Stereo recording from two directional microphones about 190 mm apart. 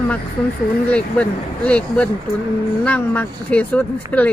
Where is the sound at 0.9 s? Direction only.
5° left (ahead or behind).